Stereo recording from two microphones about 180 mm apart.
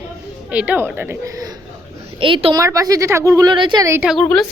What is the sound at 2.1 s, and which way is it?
A woman's voice, 30° right (ahead or behind).